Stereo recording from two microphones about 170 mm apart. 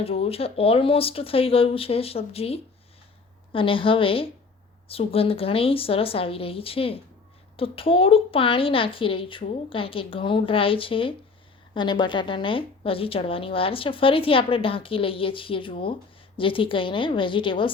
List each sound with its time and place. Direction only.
0.0 s a woman's voice: 35° left (ahead or behind)